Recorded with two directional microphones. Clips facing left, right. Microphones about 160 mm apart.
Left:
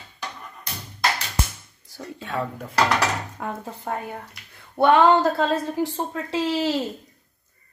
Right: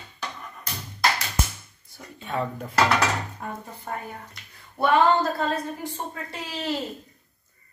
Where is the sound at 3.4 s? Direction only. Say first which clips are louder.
Left 4 dB; 80° left.